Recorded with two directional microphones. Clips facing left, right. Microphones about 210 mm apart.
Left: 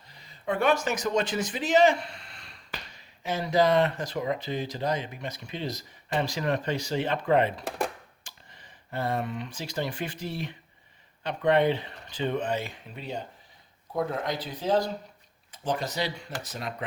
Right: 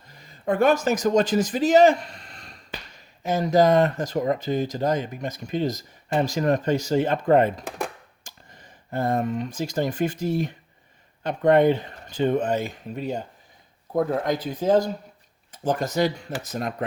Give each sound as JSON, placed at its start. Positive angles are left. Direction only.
{"t": 0.1, "sound": "speech", "side_deg": -45}
{"t": 14.3, "sound": "speech", "side_deg": -45}